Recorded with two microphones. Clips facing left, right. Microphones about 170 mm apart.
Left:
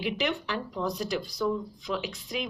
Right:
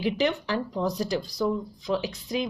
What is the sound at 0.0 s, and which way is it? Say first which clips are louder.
A woman's voice: right 4 dB; 40° right (ahead or behind).